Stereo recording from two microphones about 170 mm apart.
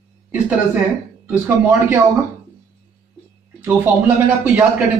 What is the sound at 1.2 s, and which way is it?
Speech, 10° right (ahead or behind).